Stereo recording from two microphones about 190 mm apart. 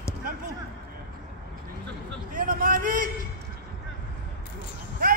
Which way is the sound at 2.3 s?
45° right (ahead or behind).